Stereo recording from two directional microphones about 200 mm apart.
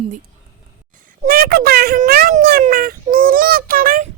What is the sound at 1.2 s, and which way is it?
Speech, 50° right (ahead or behind).